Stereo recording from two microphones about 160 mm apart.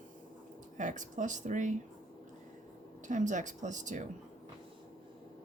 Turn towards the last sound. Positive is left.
turn(degrees=-50)  # may be behind; listen again after turning